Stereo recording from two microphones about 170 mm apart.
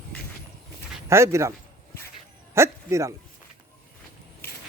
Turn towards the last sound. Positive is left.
turn(degrees=-15)  # may be behind; listen again after turning